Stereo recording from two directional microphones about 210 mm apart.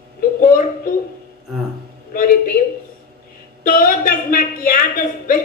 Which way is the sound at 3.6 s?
40° left (ahead or behind).